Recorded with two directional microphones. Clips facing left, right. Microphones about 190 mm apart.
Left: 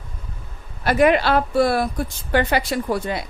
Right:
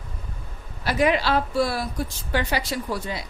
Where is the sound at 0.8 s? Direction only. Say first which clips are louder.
Left 5 dB; 55° left (ahead or behind).